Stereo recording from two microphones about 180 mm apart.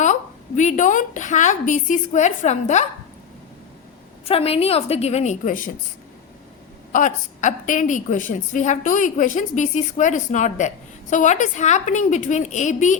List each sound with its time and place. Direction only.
0.0 s a woman's voice: 40° left (ahead or behind)
4.3 s a woman's voice: 35° left (ahead or behind)
6.9 s a woman's voice: 45° left (ahead or behind)